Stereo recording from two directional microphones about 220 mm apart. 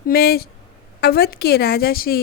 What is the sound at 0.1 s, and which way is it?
A woman's voice, 45° left (ahead or behind).